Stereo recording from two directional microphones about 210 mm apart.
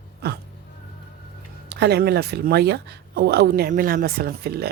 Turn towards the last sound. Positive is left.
turn(degrees=-50)  # may be behind; listen again after turning